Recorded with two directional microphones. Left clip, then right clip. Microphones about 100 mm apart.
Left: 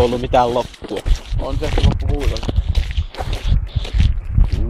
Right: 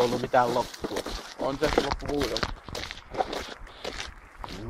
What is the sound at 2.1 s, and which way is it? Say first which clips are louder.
Speech: left 3 dB; 40° right (ahead or behind).